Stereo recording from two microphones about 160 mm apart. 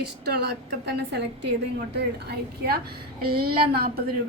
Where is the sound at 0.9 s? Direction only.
90° right; by 4.0 s 75° right (ahead or behind).